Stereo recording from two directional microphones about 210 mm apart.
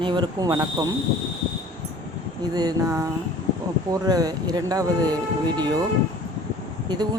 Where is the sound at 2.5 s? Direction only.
20° right (ahead or behind).